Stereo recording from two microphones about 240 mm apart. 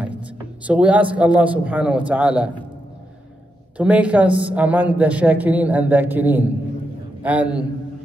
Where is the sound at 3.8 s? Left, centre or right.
Centre.